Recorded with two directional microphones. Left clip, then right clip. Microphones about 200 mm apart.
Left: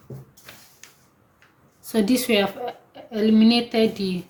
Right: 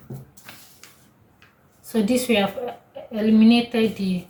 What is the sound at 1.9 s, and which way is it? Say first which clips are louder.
Speech: even; 45° left (ahead or behind).